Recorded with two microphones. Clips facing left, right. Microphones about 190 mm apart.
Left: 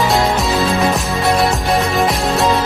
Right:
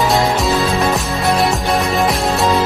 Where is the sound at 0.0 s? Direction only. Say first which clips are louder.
Even; centre (ahead or behind).